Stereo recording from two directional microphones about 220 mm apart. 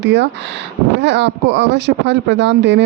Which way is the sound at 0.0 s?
50° right (ahead or behind).